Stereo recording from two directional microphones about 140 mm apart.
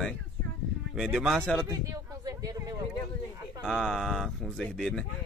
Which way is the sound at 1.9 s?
25° right (ahead or behind).